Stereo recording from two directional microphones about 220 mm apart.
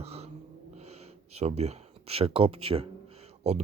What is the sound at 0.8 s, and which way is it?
Speech, 30° right (ahead or behind).